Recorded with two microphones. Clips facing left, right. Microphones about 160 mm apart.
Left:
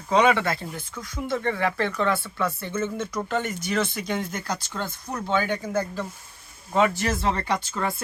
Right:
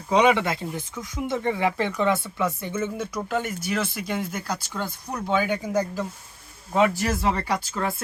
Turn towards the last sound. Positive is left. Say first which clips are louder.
# even
turn(degrees=-5)  # may be behind; listen again after turning